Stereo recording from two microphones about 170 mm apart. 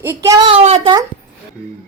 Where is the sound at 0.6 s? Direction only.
40° right (ahead or behind).